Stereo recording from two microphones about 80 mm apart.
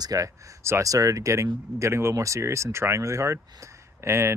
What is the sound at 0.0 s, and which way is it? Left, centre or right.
Speech, right.